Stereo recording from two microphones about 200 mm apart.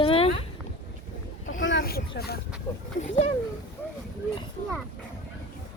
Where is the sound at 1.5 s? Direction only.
70° left (ahead or behind).